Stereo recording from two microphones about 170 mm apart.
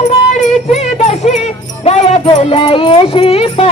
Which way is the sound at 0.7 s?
40° left (ahead or behind).